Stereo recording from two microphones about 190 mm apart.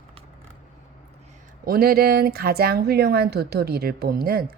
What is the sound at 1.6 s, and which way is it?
A woman's voice, 50° right (ahead or behind).